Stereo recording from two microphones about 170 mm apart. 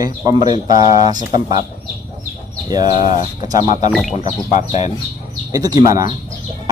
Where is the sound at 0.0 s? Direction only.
25° right (ahead or behind).